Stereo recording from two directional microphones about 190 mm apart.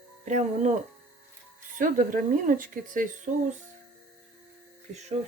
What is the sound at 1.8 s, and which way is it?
A woman's voice, 45° right (ahead or behind).